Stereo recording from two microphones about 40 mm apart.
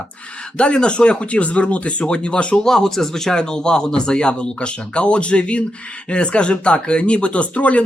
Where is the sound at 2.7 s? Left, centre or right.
Centre.